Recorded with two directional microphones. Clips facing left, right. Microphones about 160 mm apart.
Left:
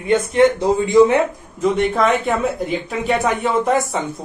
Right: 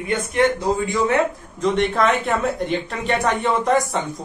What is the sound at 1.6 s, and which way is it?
Speech, centre (ahead or behind).